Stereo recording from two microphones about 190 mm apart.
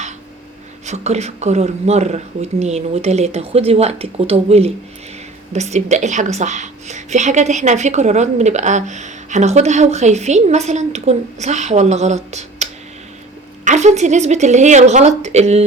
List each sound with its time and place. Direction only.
0.9 s a woman's voice: 35° right (ahead or behind)
13.7 s a woman's voice: 35° right (ahead or behind)